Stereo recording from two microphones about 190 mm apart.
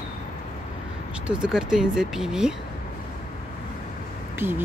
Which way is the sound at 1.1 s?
5° right (ahead or behind).